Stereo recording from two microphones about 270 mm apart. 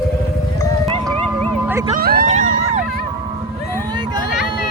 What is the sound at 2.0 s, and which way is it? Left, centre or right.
Vehicle, right.